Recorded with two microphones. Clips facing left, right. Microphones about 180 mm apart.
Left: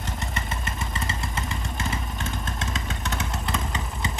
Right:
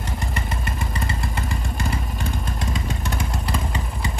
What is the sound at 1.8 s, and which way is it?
Vehicle, centre (ahead or behind).